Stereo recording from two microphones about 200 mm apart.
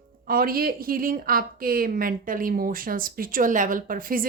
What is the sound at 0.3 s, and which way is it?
A woman's voice, 50° right (ahead or behind).